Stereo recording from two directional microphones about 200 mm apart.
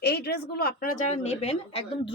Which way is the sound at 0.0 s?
50° left (ahead or behind).